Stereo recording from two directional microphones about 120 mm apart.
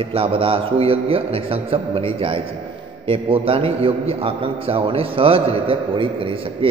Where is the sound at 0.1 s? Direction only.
50° right (ahead or behind).